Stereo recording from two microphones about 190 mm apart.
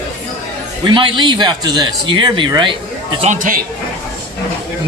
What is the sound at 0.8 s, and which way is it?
Speech, 25° right (ahead or behind).